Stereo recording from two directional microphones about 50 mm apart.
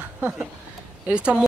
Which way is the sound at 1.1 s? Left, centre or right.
Right.